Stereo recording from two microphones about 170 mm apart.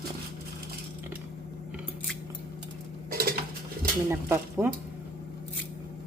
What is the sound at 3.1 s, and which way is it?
Dishes, 60° right (ahead or behind).